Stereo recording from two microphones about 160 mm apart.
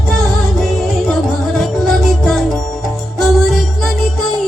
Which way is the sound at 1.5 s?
Centre (ahead or behind).